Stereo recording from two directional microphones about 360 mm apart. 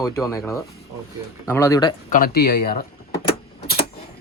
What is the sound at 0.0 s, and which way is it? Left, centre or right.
Speech, centre.